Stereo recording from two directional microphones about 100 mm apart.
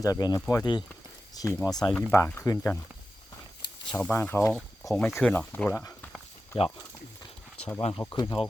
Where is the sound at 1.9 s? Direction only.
15° left (ahead or behind).